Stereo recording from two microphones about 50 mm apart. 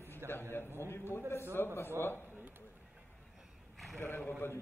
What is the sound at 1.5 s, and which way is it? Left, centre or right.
Speech, left.